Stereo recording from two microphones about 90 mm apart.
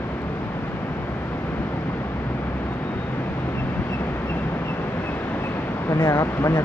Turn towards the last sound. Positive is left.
turn(degrees=35)  # may be behind; listen again after turning